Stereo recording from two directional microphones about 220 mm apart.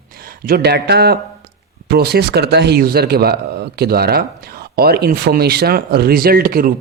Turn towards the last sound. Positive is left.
turn(degrees=-40)  # may be behind; listen again after turning